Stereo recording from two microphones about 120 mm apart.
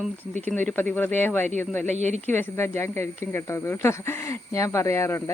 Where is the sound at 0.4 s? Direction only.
15° left (ahead or behind).